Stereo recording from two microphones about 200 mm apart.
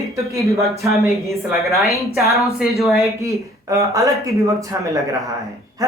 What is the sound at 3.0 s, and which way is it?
Speech, 15° right (ahead or behind).